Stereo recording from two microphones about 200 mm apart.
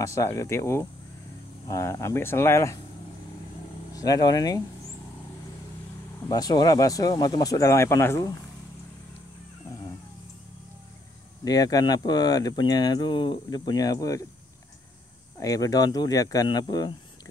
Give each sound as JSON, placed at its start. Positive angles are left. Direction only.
{"t": 0.0, "sound": "speech", "side_deg": 15}
{"t": 3.9, "sound": "speech", "side_deg": 15}
{"t": 6.2, "sound": "speech", "side_deg": 20}
{"t": 11.4, "sound": "speech", "side_deg": 20}
{"t": 15.3, "sound": "speech", "side_deg": 15}